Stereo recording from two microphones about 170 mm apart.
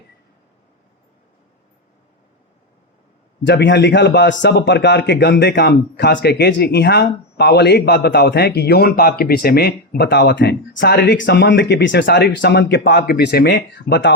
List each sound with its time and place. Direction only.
3.4 s a man's voice: 90° left